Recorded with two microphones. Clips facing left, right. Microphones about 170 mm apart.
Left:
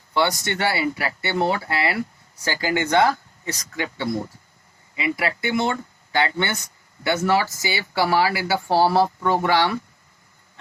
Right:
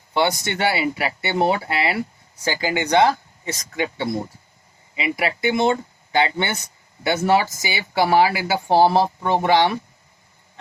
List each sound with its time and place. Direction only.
0.1 s speech: 20° right (ahead or behind)